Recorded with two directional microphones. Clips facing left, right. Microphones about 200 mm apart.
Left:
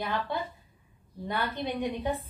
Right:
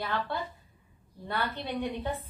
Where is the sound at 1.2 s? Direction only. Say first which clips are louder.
Left 2 dB; 15° left (ahead or behind).